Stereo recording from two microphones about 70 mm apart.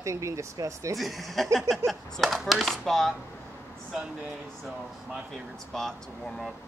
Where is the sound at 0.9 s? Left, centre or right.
Centre.